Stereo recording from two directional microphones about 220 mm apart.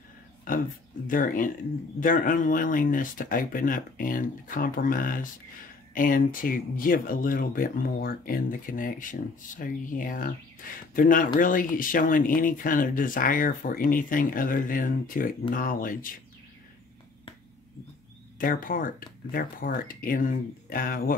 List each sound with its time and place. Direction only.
1.0 s speech: 40° left (ahead or behind)
18.4 s speech: 40° left (ahead or behind)